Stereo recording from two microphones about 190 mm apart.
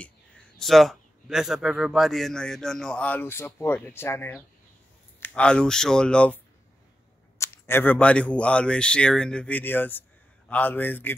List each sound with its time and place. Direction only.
0.6 s a man's voice: centre (ahead or behind)